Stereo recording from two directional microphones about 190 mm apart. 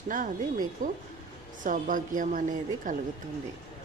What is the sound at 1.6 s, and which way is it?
Speech, 45° right (ahead or behind).